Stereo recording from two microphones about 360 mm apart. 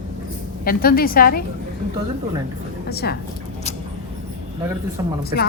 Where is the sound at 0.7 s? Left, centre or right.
Left.